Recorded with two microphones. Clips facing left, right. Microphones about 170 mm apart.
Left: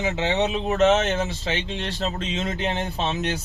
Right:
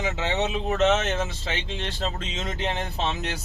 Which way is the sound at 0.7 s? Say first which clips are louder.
Left 3 dB; 35° left (ahead or behind).